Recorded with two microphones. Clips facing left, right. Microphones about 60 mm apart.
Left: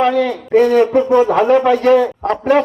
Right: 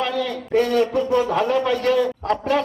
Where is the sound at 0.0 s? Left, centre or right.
Left.